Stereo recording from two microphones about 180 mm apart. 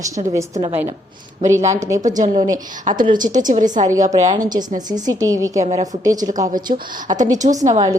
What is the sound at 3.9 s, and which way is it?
A woman's voice, 20° right (ahead or behind).